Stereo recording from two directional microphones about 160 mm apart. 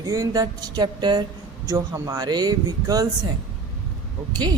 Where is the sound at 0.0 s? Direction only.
20° right (ahead or behind).